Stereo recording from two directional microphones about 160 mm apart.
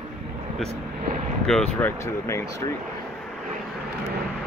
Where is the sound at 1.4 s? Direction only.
5° left (ahead or behind).